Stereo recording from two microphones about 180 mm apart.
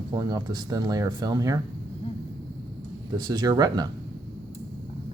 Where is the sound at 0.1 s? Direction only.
20° right (ahead or behind).